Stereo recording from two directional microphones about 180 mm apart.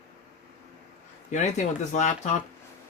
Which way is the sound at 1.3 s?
40° left (ahead or behind).